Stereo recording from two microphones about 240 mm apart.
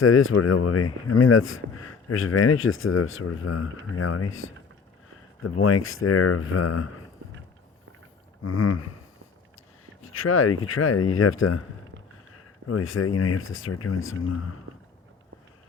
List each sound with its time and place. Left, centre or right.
0.0 s speech: left
8.4 s speech: left
10.0 s speech: left
12.6 s speech: left